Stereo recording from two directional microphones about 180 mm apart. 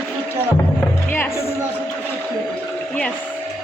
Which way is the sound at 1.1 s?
15° left (ahead or behind).